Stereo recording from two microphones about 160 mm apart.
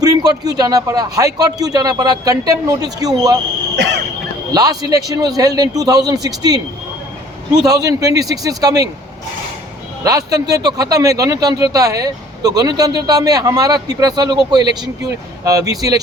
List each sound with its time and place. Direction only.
0.0 s speech: 25° right (ahead or behind)
4.5 s speech: 25° right (ahead or behind)
7.6 s speech: 20° right (ahead or behind)
10.0 s speech: 20° right (ahead or behind)